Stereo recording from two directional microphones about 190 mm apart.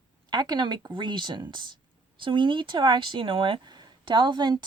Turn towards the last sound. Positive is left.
turn(degrees=-25)  # may be behind; listen again after turning